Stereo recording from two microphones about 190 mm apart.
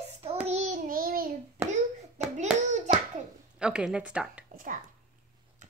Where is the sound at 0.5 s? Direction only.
40° right (ahead or behind).